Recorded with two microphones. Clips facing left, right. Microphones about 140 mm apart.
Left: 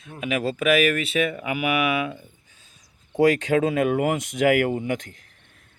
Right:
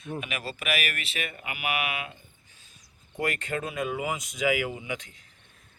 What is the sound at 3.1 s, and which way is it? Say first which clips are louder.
Speech: left 12 dB; 90° left.